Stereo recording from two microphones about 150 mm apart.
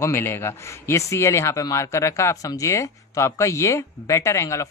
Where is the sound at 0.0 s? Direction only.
15° left (ahead or behind).